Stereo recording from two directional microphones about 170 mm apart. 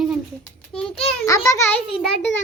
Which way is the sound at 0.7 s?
5° left (ahead or behind).